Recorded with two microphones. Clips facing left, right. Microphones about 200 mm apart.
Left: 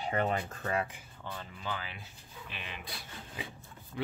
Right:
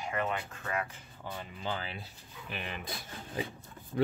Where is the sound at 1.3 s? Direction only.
30° right (ahead or behind).